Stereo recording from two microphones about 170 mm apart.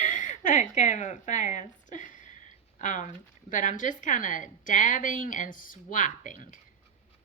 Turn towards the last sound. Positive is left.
turn(degrees=50)  # may be behind; listen again after turning